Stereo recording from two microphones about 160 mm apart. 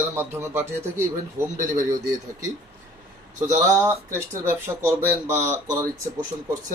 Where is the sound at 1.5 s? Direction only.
55° right (ahead or behind).